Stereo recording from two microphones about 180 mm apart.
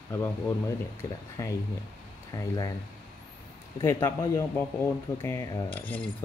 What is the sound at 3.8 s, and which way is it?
Speech, 15° left (ahead or behind).